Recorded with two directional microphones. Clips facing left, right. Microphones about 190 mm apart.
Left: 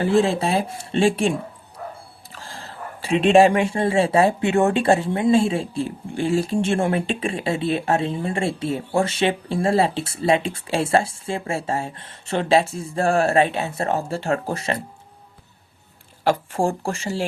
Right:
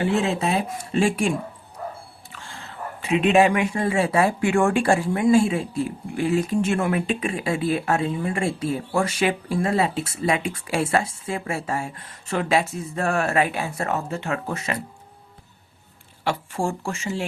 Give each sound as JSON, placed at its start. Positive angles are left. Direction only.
{"t": 0.0, "sound": "speech", "side_deg": 35}
{"t": 2.3, "sound": "speech", "side_deg": 35}
{"t": 16.2, "sound": "speech", "side_deg": 40}